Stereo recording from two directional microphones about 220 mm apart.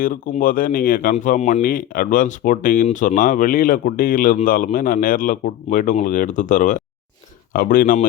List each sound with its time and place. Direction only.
0.0 s speech: 40° left (ahead or behind)